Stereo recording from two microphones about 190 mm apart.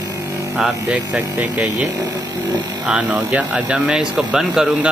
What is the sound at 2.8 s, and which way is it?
Speech, 5° right (ahead or behind).